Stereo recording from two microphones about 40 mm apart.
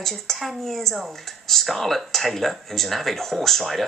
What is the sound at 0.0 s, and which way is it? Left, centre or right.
Speech, centre.